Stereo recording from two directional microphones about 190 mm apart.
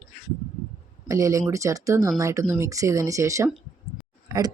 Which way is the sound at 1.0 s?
15° right (ahead or behind).